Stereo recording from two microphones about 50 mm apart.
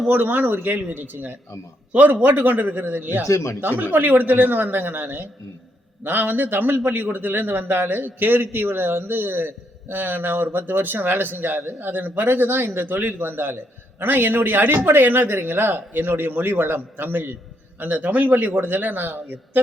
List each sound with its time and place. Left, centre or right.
0.1 s speech: right
3.2 s speech: left
3.6 s a man's voice: right